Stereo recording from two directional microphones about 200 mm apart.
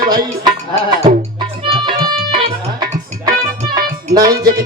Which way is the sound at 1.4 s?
25° right (ahead or behind).